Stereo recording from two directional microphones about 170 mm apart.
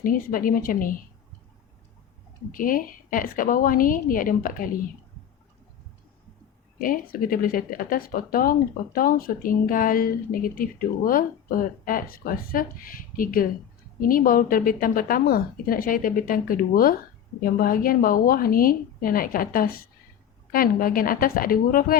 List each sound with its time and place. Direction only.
0.0 s speech: 55° left (ahead or behind)
2.5 s speech: 55° left (ahead or behind)
6.7 s speech: 55° left (ahead or behind)